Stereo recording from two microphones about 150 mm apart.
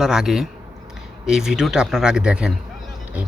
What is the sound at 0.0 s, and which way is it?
A man's voice, 5° right (ahead or behind).